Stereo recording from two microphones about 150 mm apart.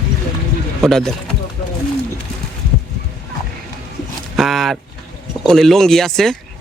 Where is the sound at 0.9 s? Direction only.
Centre (ahead or behind).